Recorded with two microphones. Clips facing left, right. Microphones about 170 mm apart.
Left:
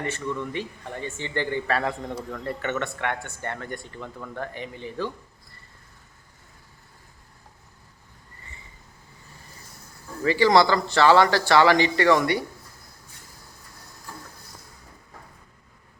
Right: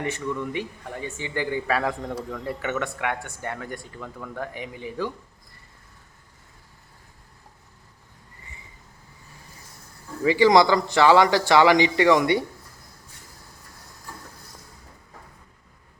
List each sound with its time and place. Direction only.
0.0 s speech: 15° right (ahead or behind)
10.2 s speech: 15° right (ahead or behind)